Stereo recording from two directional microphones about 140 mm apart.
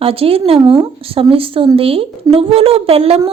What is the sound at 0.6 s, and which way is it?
A woman's voice, 30° right (ahead or behind).